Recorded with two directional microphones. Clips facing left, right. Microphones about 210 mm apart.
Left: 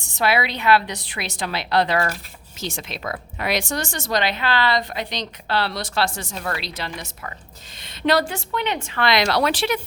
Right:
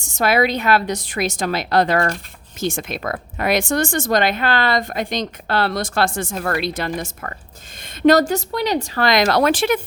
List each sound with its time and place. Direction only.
0.0 s speech: 45° right (ahead or behind)